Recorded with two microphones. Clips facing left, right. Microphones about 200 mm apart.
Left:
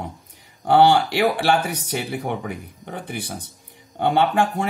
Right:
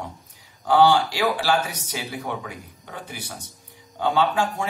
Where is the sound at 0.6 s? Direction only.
60° left (ahead or behind).